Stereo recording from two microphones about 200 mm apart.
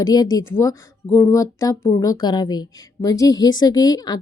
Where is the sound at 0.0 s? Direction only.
20° left (ahead or behind).